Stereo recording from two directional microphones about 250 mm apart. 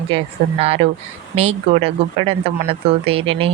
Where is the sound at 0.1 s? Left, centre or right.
Right.